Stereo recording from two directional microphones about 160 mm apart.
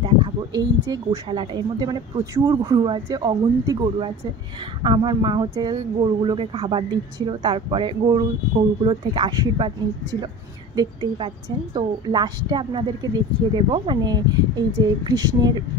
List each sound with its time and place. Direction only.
0.0 s speech: 25° right (ahead or behind)
10.8 s speech: 25° right (ahead or behind)